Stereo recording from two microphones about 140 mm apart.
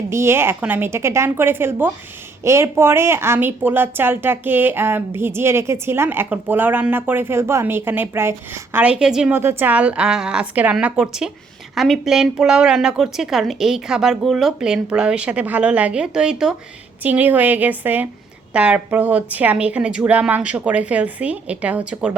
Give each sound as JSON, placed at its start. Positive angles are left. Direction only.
{"t": 0.1, "sound": "speech", "side_deg": -20}
{"t": 9.3, "sound": "a woman's voice", "side_deg": -15}